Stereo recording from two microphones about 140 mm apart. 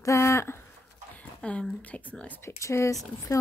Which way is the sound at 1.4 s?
5° left (ahead or behind).